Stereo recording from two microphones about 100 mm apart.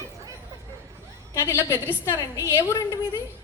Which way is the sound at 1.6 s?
25° left (ahead or behind).